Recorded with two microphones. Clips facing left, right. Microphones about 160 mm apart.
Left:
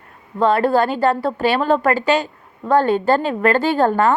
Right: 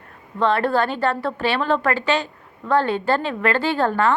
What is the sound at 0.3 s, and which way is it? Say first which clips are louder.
A woman's voice: left 4 dB; 40° left (ahead or behind).